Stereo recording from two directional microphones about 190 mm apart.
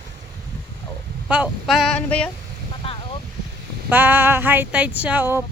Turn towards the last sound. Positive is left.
turn(degrees=-10)  # may be behind; listen again after turning